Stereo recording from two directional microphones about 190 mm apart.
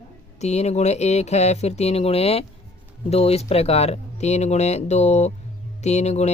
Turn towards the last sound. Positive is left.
turn(degrees=35)  # may be behind; listen again after turning